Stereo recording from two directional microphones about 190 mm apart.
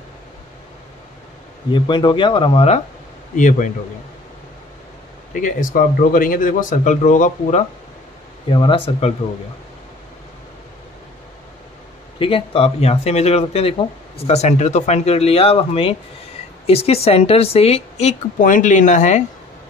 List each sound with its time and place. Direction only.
1.7 s speech: 25° left (ahead or behind); by 3.7 s 40° left (ahead or behind)
5.3 s speech: 45° left (ahead or behind)
8.5 s speech: 25° left (ahead or behind)
12.2 s speech: 30° left (ahead or behind)